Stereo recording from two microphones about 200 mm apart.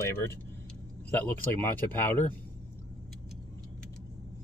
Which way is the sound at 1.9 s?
10° left (ahead or behind).